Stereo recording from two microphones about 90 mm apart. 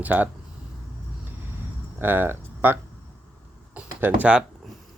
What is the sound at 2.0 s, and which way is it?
Speech, 25° right (ahead or behind).